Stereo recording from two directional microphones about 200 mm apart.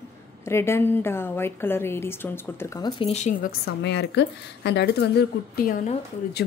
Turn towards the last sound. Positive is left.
turn(degrees=45)  # may be behind; listen again after turning